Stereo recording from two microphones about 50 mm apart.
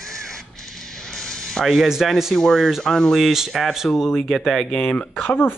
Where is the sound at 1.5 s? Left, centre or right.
Centre.